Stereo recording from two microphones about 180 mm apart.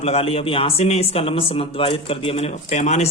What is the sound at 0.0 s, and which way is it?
Speech, 35° left (ahead or behind).